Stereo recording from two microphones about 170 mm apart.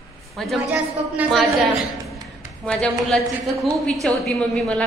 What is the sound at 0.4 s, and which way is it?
A woman's voice, 5° right (ahead or behind).